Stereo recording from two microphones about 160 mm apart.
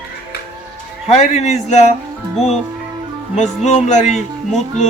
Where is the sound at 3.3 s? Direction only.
45° left (ahead or behind).